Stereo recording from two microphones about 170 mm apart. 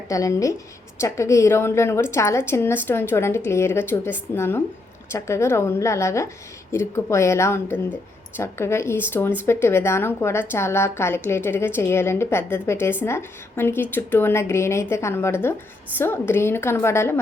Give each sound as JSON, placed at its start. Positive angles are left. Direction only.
{"t": 0.1, "sound": "a woman's voice", "side_deg": 20}